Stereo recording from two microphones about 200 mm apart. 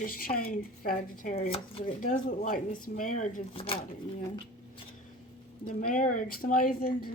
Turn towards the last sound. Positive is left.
turn(degrees=45)  # may be behind; listen again after turning